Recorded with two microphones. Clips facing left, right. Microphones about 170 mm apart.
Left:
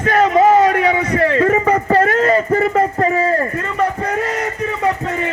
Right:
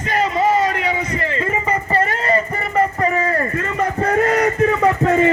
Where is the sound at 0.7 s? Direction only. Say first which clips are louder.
Left 6 dB; 60° left (ahead or behind).